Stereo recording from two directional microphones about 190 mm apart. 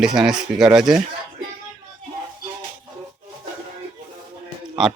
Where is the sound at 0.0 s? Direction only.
5° right (ahead or behind).